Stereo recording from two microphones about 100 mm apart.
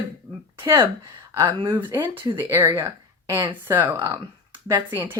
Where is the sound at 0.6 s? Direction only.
30° right (ahead or behind).